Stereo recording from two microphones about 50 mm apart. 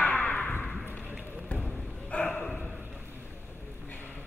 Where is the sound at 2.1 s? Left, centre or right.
Left.